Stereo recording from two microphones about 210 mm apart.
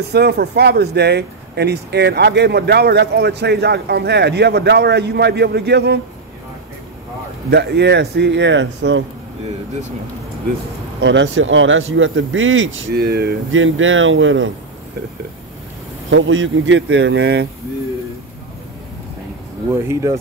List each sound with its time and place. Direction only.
0.1 s speech: 50° right (ahead or behind)
7.4 s speech: 50° right (ahead or behind)
11.0 s speech: 60° right (ahead or behind)
12.9 s speech: 50° right (ahead or behind); by 14.5 s 65° right (ahead or behind)
16.1 s speech: 65° right (ahead or behind)
19.7 s speech: 15° right (ahead or behind)